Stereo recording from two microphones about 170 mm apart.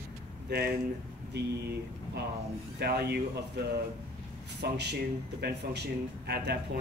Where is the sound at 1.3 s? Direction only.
70° right (ahead or behind).